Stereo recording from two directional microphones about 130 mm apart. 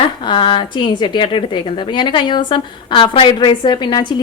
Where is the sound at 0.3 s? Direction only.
40° left (ahead or behind).